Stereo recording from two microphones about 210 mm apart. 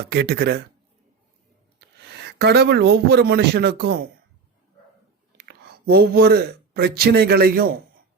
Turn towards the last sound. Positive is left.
turn(degrees=-45)  # may be behind; listen again after turning